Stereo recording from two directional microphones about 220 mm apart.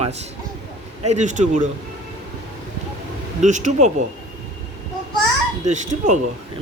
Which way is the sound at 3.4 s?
35° right (ahead or behind).